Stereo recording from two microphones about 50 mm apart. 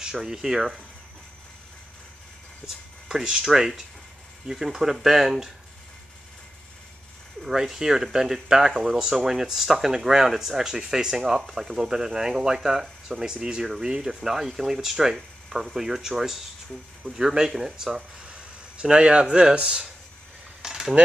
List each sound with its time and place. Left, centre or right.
0.0 s speech: centre
2.6 s speech: centre
7.4 s speech: centre
20.6 s a sound: centre